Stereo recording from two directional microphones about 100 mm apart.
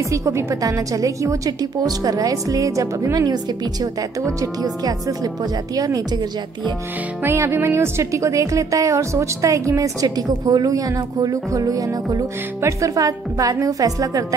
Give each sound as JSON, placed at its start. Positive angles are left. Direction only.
{"t": 0.1, "sound": "speech", "side_deg": -30}
{"t": 4.4, "sound": "speech", "side_deg": -40}
{"t": 7.2, "sound": "speech", "side_deg": -25}